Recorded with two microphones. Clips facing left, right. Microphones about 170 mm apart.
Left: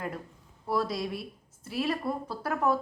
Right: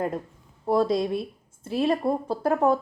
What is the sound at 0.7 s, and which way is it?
A woman's voice, 25° right (ahead or behind).